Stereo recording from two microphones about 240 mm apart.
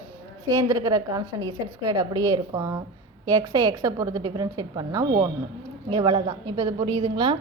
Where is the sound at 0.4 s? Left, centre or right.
Centre.